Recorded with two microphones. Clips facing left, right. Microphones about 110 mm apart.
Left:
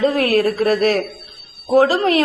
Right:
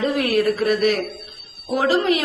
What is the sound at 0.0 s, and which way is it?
A woman's voice, 45° left (ahead or behind).